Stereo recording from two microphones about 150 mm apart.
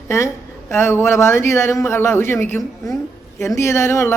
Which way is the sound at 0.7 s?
15° left (ahead or behind).